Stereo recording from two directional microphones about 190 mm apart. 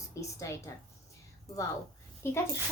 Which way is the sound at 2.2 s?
15° left (ahead or behind).